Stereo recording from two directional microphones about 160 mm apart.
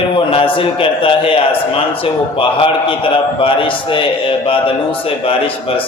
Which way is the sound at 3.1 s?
35° left (ahead or behind).